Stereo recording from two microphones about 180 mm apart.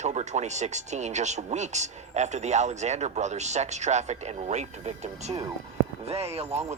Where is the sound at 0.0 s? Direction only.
40° right (ahead or behind).